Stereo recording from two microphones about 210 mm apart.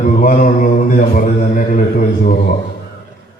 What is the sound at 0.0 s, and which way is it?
Mantra, 40° left (ahead or behind).